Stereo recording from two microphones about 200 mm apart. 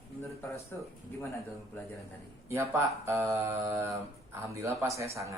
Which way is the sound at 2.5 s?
15° right (ahead or behind).